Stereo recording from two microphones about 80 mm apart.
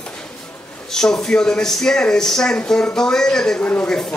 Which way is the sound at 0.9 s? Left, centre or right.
Centre.